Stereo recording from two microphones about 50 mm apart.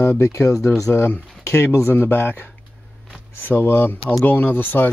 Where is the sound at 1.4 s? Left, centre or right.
Left.